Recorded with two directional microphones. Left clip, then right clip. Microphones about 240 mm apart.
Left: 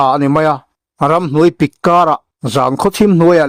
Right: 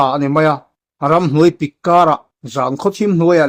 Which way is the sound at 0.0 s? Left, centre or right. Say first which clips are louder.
Left 2 dB; left.